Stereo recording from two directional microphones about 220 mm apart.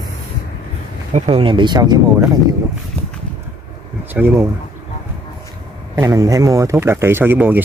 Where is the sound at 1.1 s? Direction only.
25° right (ahead or behind).